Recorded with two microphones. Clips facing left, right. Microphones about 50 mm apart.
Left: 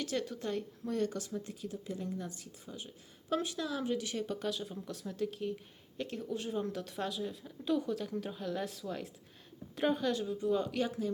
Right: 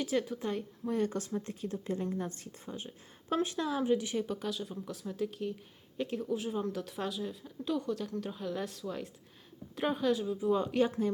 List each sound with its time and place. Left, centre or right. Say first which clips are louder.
0.0 s speech: right 4 dB; centre
1.1 s speech: right 4 dB; right
1.6 s speech: right 5 dB; right; by 4.3 s centre
4.3 s speech: even; centre; by 10.9 s right